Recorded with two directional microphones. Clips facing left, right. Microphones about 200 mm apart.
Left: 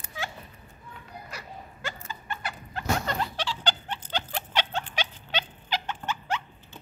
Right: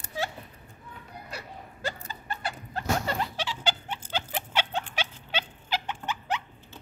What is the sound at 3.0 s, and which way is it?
Rodents, 10° right (ahead or behind).